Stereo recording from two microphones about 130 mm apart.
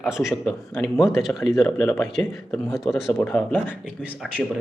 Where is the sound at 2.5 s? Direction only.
Centre (ahead or behind).